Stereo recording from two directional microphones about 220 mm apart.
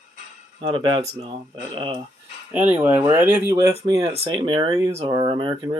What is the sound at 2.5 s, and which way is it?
Speech, 10° right (ahead or behind).